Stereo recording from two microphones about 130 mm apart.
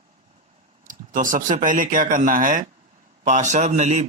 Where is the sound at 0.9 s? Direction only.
85° right.